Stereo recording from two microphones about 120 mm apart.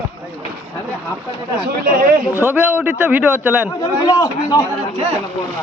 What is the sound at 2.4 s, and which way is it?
A man's voice, 15° right (ahead or behind).